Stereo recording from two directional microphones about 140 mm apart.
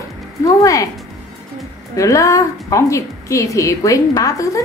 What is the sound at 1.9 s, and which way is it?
A woman's voice, 20° left (ahead or behind).